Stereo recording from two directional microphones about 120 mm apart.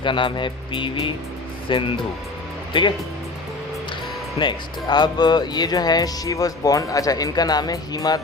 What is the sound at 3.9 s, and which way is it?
Music, 40° left (ahead or behind).